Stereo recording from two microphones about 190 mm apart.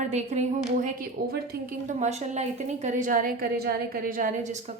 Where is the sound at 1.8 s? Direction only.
35° right (ahead or behind).